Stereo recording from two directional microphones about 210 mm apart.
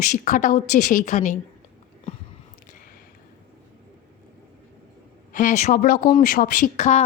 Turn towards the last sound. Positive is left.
turn(degrees=35)  # may be behind; listen again after turning